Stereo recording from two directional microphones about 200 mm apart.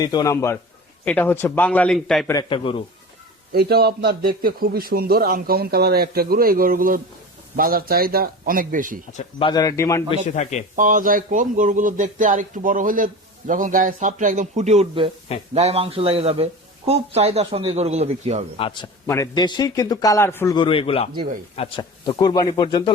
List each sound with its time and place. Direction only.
0.0 s a man's voice: 20° left (ahead or behind); by 2.3 s 5° left (ahead or behind)
2.3 s speech: 25° left (ahead or behind)
3.5 s a man's voice: 50° right (ahead or behind)
9.1 s a man's voice: 25° left (ahead or behind)
10.2 s speech: 35° left (ahead or behind)
10.8 s speech: 40° right (ahead or behind)
18.5 s speech: 25° left (ahead or behind)
19.0 s a man's voice: 15° left (ahead or behind)